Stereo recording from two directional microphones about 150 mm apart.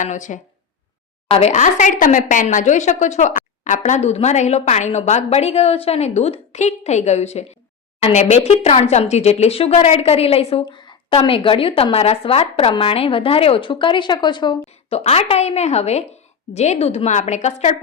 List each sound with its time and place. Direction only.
0.0 s a woman's voice: 55° left (ahead or behind); by 14.6 s 30° left (ahead or behind)
14.8 s a woman's voice: 45° left (ahead or behind)